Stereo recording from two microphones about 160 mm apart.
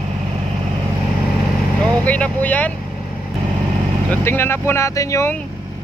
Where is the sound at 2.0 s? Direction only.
10° left (ahead or behind).